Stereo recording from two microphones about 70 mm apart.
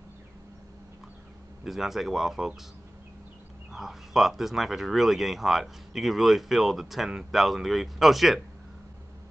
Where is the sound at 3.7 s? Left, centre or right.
Centre.